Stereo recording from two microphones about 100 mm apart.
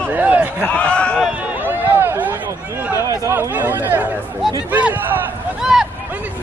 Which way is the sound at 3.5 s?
20° right (ahead or behind).